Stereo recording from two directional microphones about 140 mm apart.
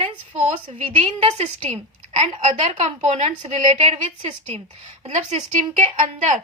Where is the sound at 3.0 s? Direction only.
60° right (ahead or behind).